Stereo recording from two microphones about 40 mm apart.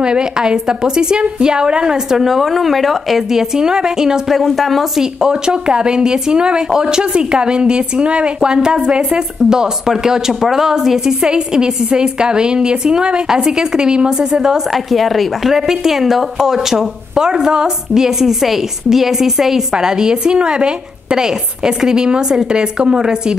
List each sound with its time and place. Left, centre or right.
0.0 s a woman's voice: right; by 5.0 s centre
5.0 s a woman's voice: centre
14.7 s a woman's voice: centre
15.5 s a woman's voice: centre